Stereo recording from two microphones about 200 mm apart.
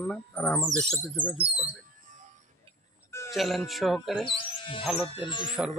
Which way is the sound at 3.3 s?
Centre (ahead or behind).